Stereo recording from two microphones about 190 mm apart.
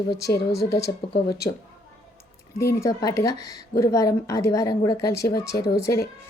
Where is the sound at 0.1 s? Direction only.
60° left (ahead or behind).